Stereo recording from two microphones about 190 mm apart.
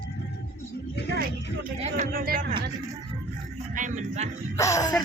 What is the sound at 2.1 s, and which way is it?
Speech, 50° right (ahead or behind).